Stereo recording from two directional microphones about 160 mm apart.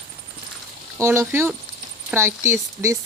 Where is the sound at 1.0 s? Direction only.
15° right (ahead or behind).